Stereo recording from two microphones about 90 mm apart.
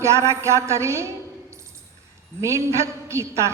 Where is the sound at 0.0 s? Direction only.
30° right (ahead or behind).